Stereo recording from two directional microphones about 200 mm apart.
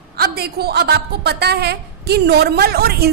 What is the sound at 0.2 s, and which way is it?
A woman's voice, 50° right (ahead or behind).